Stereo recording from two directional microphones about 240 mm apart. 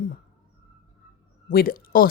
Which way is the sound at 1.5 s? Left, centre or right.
Left.